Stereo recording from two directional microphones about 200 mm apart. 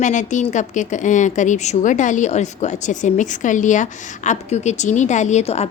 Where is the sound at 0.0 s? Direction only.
40° left (ahead or behind).